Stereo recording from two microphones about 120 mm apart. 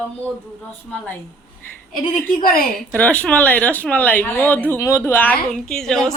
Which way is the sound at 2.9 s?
10° left (ahead or behind).